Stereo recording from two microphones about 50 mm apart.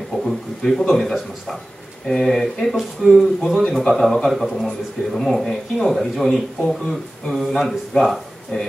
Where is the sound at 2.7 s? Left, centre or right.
Centre.